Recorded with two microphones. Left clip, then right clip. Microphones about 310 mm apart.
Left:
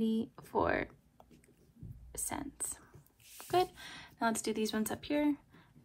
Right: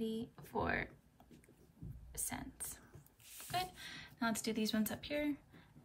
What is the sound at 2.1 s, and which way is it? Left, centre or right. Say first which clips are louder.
Whispering: left 6 dB; centre.